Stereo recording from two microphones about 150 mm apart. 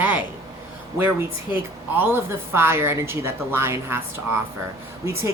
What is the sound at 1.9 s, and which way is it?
A woman's voice, 15° right (ahead or behind).